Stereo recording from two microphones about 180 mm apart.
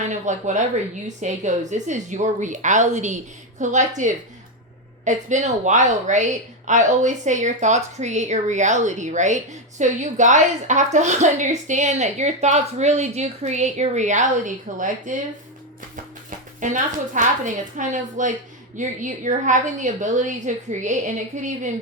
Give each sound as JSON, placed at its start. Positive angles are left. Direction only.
{"t": 0.0, "sound": "a sound", "side_deg": -40}
{"t": 1.0, "sound": "a woman's voice", "side_deg": -40}
{"t": 16.6, "sound": "a woman's voice", "side_deg": -45}